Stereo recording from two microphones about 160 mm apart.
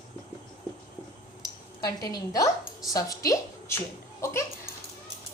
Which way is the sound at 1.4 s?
25° left (ahead or behind).